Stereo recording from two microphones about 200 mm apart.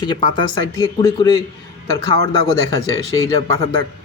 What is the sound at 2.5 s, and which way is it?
Speech, 15° left (ahead or behind).